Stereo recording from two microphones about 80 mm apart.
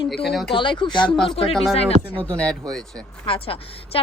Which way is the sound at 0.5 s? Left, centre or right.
Left.